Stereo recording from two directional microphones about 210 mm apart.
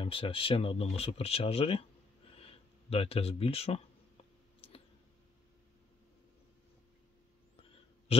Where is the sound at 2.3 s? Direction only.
25° left (ahead or behind).